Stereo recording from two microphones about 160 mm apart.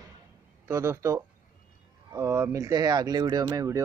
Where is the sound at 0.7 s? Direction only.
15° right (ahead or behind).